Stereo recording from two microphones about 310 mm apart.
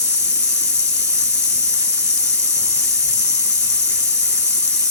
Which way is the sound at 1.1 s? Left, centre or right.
Centre.